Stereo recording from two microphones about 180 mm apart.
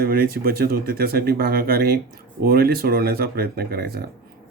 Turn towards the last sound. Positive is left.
turn(degrees=-60)  # may be behind; listen again after turning